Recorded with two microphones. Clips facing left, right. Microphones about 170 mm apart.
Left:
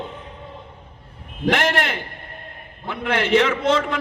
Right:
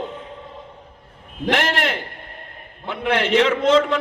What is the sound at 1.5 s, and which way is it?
A man's voice, 50° left (ahead or behind).